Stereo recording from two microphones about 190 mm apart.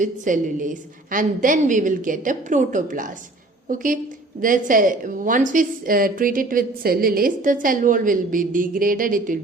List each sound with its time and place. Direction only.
0.0 s a woman's voice: 45° right (ahead or behind)
4.4 s a woman's voice: 45° right (ahead or behind)